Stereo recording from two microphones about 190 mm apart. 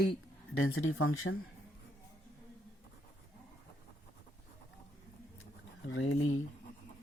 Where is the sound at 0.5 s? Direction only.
90° left.